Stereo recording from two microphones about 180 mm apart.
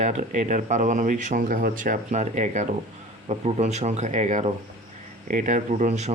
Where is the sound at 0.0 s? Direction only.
40° right (ahead or behind).